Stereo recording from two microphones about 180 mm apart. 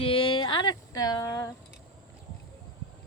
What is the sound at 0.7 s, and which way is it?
Speech, 20° left (ahead or behind).